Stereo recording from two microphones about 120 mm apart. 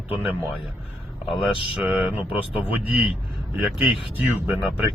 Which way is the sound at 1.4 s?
5° right (ahead or behind).